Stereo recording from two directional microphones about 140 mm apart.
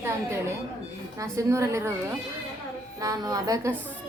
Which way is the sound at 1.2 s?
20° right (ahead or behind).